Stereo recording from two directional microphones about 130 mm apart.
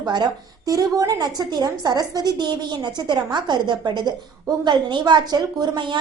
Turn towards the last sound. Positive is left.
turn(degrees=-35)  # may be behind; listen again after turning